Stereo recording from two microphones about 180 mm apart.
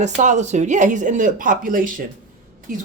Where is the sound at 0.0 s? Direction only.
40° right (ahead or behind).